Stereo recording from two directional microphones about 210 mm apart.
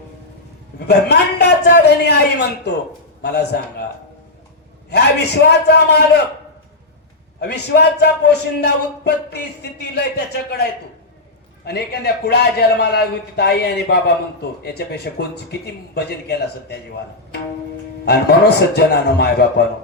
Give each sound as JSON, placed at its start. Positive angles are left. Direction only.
{"t": 0.9, "sound": "a man's voice", "side_deg": 50}
{"t": 4.9, "sound": "a man's voice", "side_deg": 50}
{"t": 7.3, "sound": "a man's voice", "side_deg": 50}
{"t": 18.0, "sound": "a man's voice", "side_deg": 50}